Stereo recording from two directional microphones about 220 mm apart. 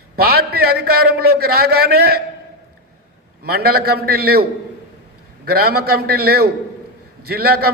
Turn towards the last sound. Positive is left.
turn(degrees=-45)  # may be behind; listen again after turning